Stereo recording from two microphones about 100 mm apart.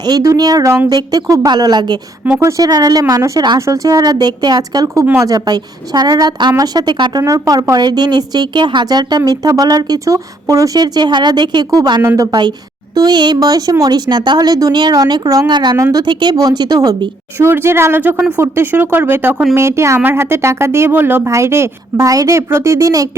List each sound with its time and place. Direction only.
0.2 s speech: 35° right (ahead or behind)
2.4 s a woman's voice: 35° right (ahead or behind)
7.2 s a woman's voice: 35° right (ahead or behind)
15.8 s speech: 35° right (ahead or behind)
17.3 s speech: 25° right (ahead or behind)